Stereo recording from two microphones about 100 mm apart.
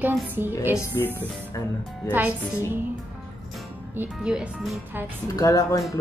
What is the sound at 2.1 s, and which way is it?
Speech, 15° right (ahead or behind).